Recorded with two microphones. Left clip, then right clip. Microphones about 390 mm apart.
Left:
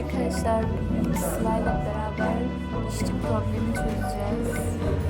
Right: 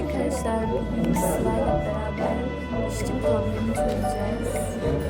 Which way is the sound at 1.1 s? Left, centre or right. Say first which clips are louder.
Right 3 dB; centre.